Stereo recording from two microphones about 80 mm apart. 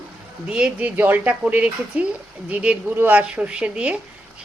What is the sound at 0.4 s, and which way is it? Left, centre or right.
A woman's voice, centre.